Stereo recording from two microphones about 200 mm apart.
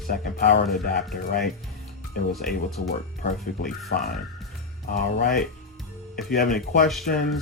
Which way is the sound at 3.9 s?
55° left (ahead or behind).